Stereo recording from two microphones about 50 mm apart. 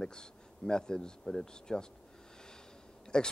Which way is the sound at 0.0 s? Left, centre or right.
Centre.